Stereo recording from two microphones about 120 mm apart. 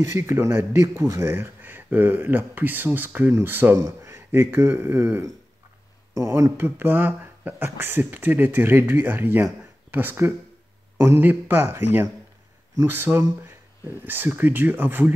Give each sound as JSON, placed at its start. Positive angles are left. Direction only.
{"t": 0.0, "sound": "a man's voice", "side_deg": -25}